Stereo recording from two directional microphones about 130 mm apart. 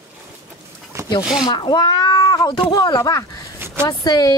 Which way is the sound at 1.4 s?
35° left (ahead or behind).